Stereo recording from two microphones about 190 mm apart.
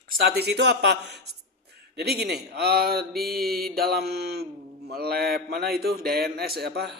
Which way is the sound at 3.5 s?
55° right (ahead or behind).